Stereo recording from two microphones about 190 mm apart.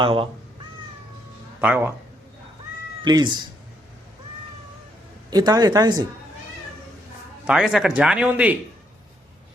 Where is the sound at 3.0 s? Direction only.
20° right (ahead or behind).